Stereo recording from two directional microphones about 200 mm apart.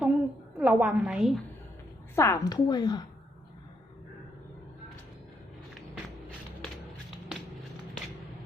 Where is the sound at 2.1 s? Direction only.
15° left (ahead or behind).